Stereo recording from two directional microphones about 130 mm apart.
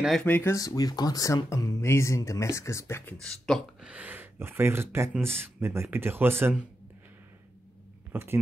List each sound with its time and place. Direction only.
0.2 s speech: 15° left (ahead or behind)
0.6 s speech: 30° left (ahead or behind)
3.2 s speech: 5° left (ahead or behind)
3.8 s speech: 10° right (ahead or behind)
8.1 s speech: 20° right (ahead or behind)